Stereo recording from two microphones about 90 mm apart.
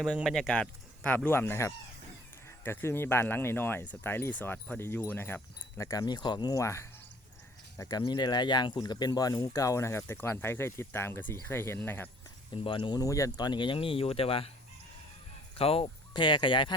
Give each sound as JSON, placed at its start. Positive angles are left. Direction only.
{"t": 0.3, "sound": "speech", "side_deg": 5}
{"t": 5.9, "sound": "speech", "side_deg": 50}
{"t": 6.6, "sound": "speech", "side_deg": 35}
{"t": 7.8, "sound": "speech", "side_deg": 45}
{"t": 12.5, "sound": "speech", "side_deg": 75}
{"t": 13.0, "sound": "speech", "side_deg": 40}
{"t": 15.5, "sound": "speech", "side_deg": 90}